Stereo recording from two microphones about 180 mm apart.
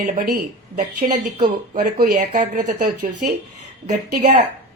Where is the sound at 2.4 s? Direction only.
45° right (ahead or behind).